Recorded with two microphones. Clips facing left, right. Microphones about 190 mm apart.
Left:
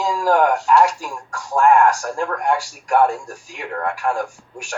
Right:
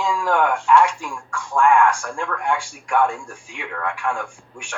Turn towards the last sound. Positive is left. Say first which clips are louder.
# left 5 dB
turn(degrees=40)  # may be behind; listen again after turning